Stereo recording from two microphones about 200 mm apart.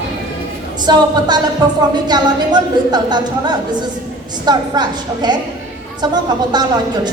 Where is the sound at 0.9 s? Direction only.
20° right (ahead or behind).